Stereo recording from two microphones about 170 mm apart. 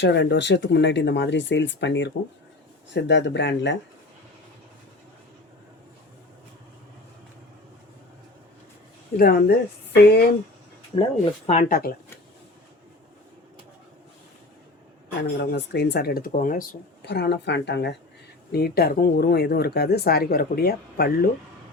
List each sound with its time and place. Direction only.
0.0 s speech: 90° left
9.1 s speech: 60° left (ahead or behind)
10.9 s speech: 35° left (ahead or behind)
15.2 s speech: 85° left; by 16.6 s 50° left (ahead or behind)
17.0 s speech: 75° left (ahead or behind)
18.5 s speech: 65° left (ahead or behind)